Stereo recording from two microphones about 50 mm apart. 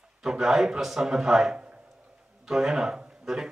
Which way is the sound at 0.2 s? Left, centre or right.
Centre.